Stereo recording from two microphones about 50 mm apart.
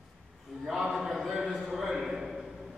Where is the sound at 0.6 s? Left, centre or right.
Centre.